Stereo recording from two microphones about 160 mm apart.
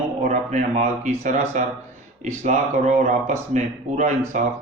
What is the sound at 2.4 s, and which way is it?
Speech, 45° right (ahead or behind).